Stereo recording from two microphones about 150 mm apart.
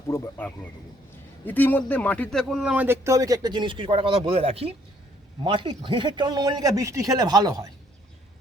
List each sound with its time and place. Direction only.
0.1 s a man's voice: 10° left (ahead or behind)
2.8 s a man's voice: 15° right (ahead or behind)